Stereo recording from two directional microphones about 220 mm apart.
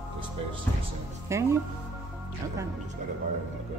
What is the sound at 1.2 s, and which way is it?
Speech, 15° right (ahead or behind).